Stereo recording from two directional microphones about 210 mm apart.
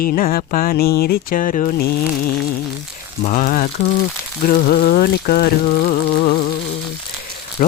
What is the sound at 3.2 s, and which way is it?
Speech, 40° left (ahead or behind).